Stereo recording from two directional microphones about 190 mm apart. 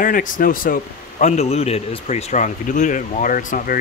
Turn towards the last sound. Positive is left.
turn(degrees=45)  # may be behind; listen again after turning